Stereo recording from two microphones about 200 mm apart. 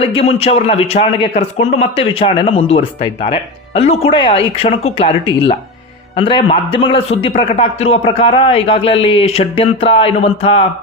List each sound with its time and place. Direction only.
0.1 s a man's voice: 30° left (ahead or behind)